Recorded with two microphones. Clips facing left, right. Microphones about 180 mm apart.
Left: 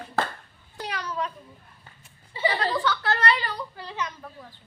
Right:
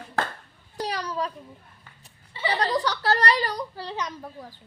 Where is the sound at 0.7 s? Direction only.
35° right (ahead or behind).